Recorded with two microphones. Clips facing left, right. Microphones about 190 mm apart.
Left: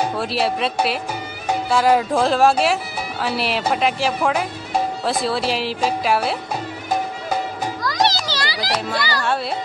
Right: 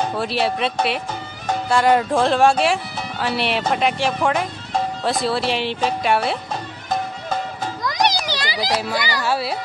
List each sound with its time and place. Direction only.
0.2 s speech: centre (ahead or behind)
6.9 s music: 10° left (ahead or behind)
7.8 s children playing: 20° right (ahead or behind)
8.9 s speech: 20° right (ahead or behind)
9.2 s speech: 5° right (ahead or behind)